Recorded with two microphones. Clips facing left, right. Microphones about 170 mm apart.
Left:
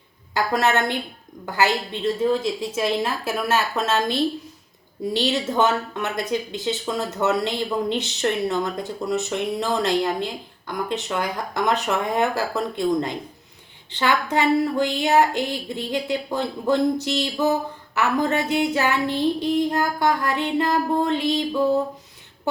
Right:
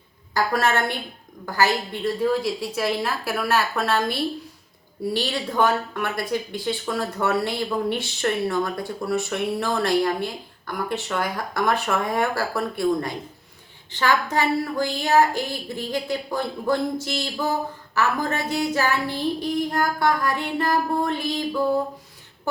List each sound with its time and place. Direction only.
0.3 s a woman's voice: 20° left (ahead or behind)